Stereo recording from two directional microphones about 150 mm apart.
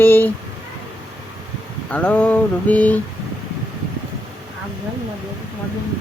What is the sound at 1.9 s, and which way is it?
Speech, 10° left (ahead or behind).